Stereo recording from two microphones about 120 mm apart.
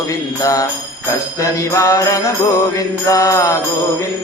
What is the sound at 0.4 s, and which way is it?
Music, 30° left (ahead or behind).